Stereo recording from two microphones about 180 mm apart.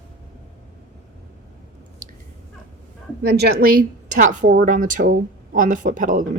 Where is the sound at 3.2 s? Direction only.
65° right (ahead or behind).